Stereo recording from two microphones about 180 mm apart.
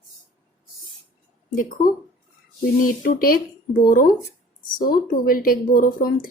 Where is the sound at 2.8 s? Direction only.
55° left (ahead or behind).